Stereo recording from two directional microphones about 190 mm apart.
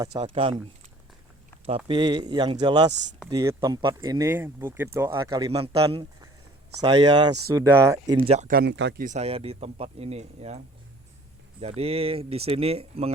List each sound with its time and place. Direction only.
0.0 s speech: 20° right (ahead or behind)
1.6 s speech: 25° right (ahead or behind)
8.4 s speech: 50° right (ahead or behind)
8.7 s speech: 70° right (ahead or behind)
9.0 s speech: 40° right (ahead or behind)
11.6 s speech: 30° right (ahead or behind)